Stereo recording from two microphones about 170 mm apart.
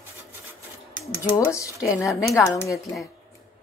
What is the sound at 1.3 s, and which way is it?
Speech, 20° left (ahead or behind).